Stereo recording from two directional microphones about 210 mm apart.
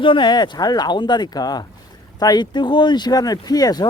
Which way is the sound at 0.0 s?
20° left (ahead or behind).